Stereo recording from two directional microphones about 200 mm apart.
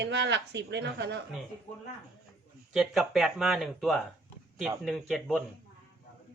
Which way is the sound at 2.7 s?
Centre (ahead or behind).